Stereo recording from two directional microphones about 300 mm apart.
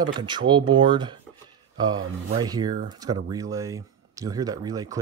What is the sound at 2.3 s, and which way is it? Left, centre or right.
Speech, centre.